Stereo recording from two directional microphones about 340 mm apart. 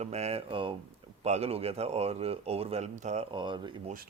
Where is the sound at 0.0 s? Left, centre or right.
Centre.